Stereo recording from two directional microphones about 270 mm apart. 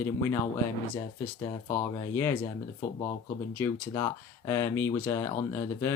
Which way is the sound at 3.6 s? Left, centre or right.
Centre.